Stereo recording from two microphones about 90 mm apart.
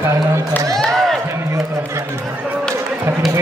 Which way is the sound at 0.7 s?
5° left (ahead or behind).